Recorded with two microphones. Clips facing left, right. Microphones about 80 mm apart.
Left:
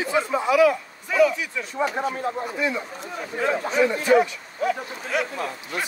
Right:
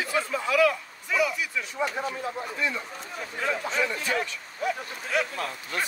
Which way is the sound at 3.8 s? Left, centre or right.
Centre.